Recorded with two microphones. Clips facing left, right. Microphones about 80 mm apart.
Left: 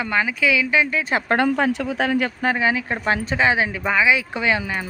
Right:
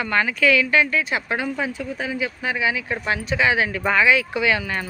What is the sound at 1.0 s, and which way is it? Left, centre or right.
Speech, left.